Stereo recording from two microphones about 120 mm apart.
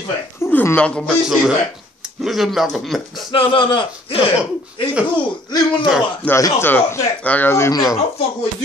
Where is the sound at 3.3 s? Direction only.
45° left (ahead or behind).